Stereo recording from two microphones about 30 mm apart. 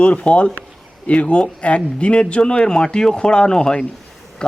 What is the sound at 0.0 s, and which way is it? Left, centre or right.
Speech, left.